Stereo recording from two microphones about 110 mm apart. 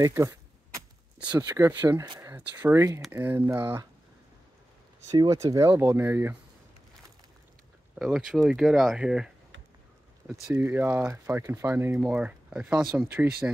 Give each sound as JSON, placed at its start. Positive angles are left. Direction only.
{"t": 0.0, "sound": "a sound", "side_deg": -30}
{"t": 1.3, "sound": "speech", "side_deg": -35}
{"t": 2.1, "sound": "a sound", "side_deg": -25}
{"t": 2.7, "sound": "speech", "side_deg": -30}
{"t": 3.1, "sound": "speech", "side_deg": -20}
{"t": 5.1, "sound": "speech", "side_deg": -30}
{"t": 8.0, "sound": "speech", "side_deg": 0}
{"t": 10.5, "sound": "speech", "side_deg": -15}